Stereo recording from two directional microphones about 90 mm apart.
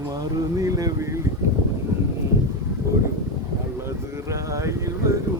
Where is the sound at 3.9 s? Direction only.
35° right (ahead or behind).